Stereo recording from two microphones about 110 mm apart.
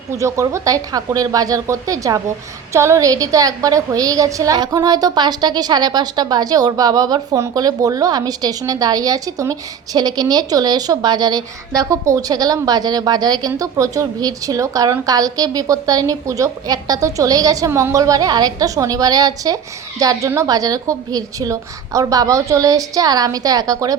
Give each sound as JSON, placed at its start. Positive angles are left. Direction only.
{"t": 0.2, "sound": "a woman's voice", "side_deg": -30}